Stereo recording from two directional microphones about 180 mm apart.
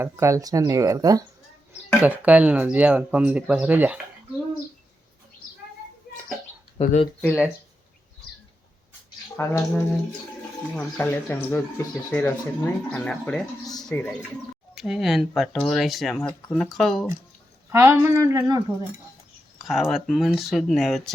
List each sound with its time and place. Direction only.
0.0 s speech: 15° right (ahead or behind)
2.0 s speech: 10° right (ahead or behind)
6.7 s speech: 35° left (ahead or behind)
7.2 s speech: 5° left (ahead or behind)
9.3 s speech: 10° left (ahead or behind)
17.7 s speech: 15° right (ahead or behind)
19.5 s speech: centre (ahead or behind)